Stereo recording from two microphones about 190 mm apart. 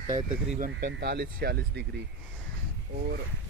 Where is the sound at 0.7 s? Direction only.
60° right (ahead or behind).